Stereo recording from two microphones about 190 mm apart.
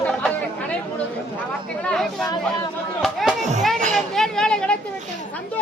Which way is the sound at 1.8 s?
Centre (ahead or behind).